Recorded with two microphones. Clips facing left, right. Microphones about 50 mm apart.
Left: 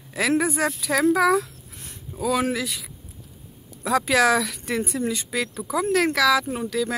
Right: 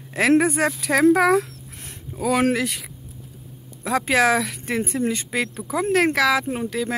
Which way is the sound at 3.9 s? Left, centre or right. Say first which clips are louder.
Even; right.